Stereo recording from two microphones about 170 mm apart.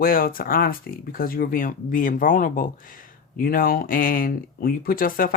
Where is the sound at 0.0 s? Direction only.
60° left (ahead or behind).